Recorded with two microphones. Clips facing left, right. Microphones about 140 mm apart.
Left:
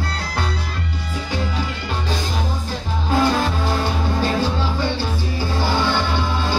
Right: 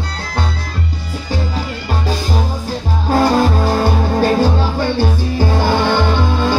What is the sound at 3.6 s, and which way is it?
Music, 45° right (ahead or behind).